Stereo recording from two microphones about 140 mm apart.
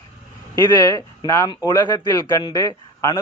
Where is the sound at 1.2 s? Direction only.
25° left (ahead or behind).